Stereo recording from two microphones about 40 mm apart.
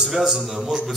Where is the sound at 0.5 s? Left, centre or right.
Centre.